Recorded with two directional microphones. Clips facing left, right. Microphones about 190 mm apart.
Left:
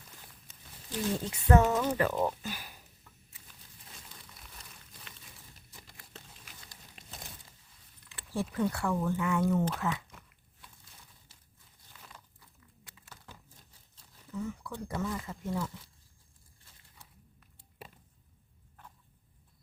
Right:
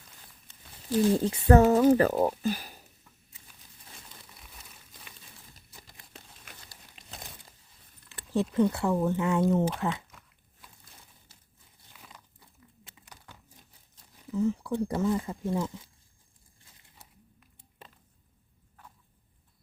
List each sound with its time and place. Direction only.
0.9 s speech: 35° right (ahead or behind)
8.3 s speech: 20° right (ahead or behind)
11.9 s crumpling: 5° right (ahead or behind)
12.4 s a sound: 25° right (ahead or behind)
14.3 s speech: 30° right (ahead or behind)